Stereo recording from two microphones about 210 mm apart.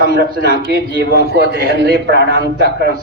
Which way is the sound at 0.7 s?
50° right (ahead or behind).